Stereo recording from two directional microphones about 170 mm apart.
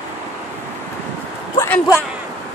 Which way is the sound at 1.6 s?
15° left (ahead or behind).